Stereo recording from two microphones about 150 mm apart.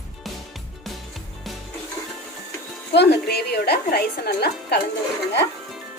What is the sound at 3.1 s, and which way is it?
A woman's voice, 90° left.